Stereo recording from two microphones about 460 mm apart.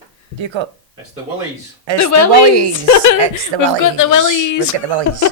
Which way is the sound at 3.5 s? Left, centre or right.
Right.